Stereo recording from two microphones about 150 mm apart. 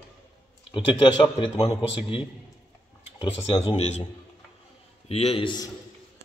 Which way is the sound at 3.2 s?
40° left (ahead or behind).